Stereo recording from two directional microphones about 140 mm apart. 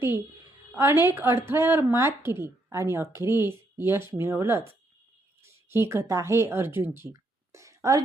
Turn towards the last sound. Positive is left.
turn(degrees=-20)  # may be behind; listen again after turning